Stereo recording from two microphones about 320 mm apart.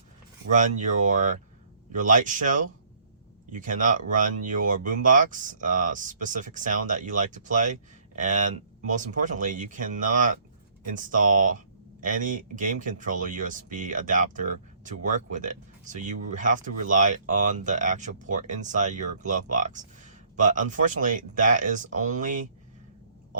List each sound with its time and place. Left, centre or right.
0.5 s speech: right